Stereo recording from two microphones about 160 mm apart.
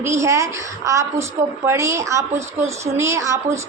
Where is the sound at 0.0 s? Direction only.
20° right (ahead or behind).